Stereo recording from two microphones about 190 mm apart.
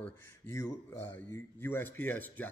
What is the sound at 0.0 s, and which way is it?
Speech, 15° left (ahead or behind).